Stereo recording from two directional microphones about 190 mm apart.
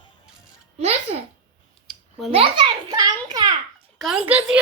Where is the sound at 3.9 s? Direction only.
Centre (ahead or behind).